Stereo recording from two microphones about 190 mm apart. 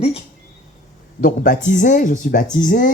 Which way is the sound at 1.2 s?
45° left (ahead or behind).